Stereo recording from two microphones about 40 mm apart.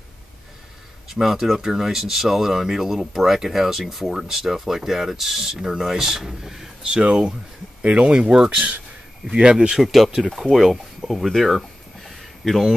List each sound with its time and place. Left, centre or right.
1.2 s speech: centre
5.6 s speech: centre
8.3 s speech: centre
9.8 s speech: centre
11.1 s a sound: centre